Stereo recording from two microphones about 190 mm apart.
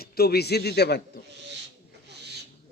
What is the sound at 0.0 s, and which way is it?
A man's voice, 55° left (ahead or behind).